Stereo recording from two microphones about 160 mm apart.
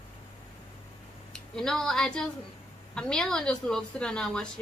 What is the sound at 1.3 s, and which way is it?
A woman's voice, 5° left (ahead or behind).